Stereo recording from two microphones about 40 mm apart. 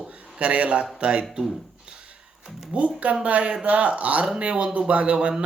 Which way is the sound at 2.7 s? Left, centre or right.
Right.